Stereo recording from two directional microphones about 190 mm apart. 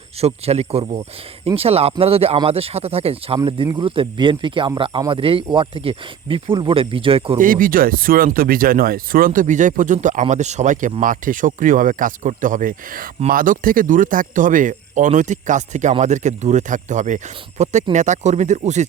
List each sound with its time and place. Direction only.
0.2 s speech: 35° right (ahead or behind)
7.3 s speech: 45° right (ahead or behind)